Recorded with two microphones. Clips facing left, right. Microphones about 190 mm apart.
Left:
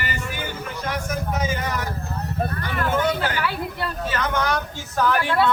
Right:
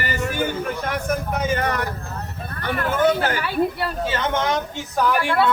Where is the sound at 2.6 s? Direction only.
55° right (ahead or behind).